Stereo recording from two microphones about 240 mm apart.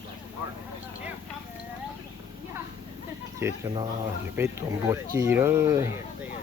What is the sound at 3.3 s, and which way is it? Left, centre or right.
Speech, centre.